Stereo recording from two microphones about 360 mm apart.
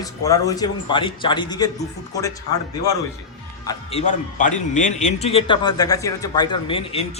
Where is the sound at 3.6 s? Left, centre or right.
Centre.